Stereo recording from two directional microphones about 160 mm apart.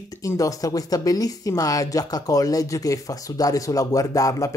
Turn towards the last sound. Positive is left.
turn(degrees=20)  # may be behind; listen again after turning